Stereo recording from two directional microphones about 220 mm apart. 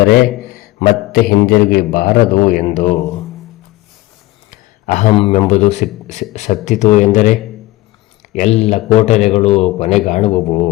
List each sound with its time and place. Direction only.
0.5 s a man's voice: 40° left (ahead or behind)
4.5 s a man's voice: 35° left (ahead or behind)